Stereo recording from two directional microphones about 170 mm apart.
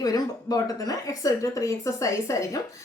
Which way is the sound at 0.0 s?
20° left (ahead or behind).